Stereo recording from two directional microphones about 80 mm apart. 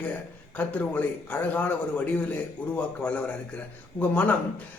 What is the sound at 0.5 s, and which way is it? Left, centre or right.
A man's voice, left.